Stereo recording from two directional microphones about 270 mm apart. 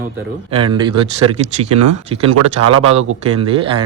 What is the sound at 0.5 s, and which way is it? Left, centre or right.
Speech, centre.